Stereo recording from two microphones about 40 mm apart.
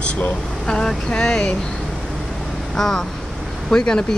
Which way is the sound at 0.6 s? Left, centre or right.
Centre.